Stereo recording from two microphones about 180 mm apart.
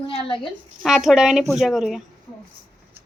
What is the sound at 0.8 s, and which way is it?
A woman's voice, centre (ahead or behind).